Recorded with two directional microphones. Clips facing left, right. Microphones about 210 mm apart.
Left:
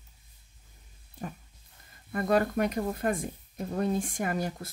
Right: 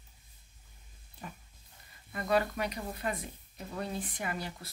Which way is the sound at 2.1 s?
50° left (ahead or behind).